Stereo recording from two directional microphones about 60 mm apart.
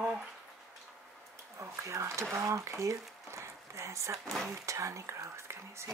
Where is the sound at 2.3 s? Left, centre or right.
Right.